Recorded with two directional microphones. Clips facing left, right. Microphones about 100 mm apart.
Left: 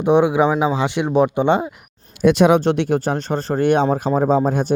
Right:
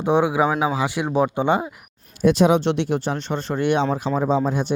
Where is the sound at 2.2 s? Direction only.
65° left (ahead or behind).